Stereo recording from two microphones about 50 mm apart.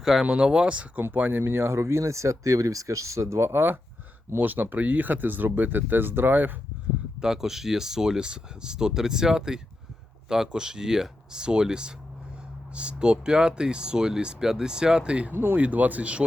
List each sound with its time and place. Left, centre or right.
0.0 s speech: centre
0.3 s speech: right
0.9 s speech: right
1.4 s speech: right
3.5 s speech: right
7.2 s speech: centre
15.3 s speech: right
15.5 s speech: right